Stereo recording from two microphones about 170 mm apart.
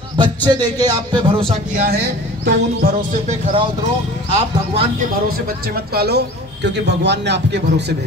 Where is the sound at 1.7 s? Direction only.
65° right (ahead or behind).